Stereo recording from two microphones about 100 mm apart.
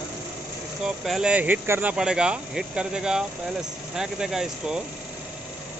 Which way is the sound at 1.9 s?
10° right (ahead or behind).